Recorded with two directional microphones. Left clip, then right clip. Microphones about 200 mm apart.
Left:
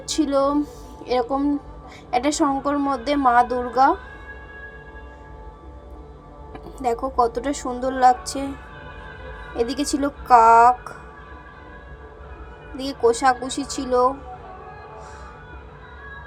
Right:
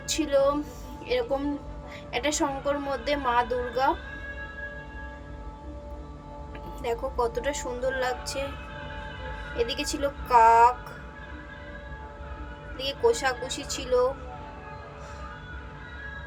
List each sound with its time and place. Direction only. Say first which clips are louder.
0.1 s speech: left 3 dB; 20° left (ahead or behind)
6.8 s speech: left 8 dB; 20° left (ahead or behind)
9.6 s speech: left 5 dB; 20° left (ahead or behind)
12.7 s speech: left 4 dB; 20° left (ahead or behind)